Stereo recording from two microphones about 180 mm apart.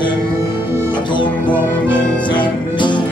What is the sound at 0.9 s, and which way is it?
Music, 25° left (ahead or behind).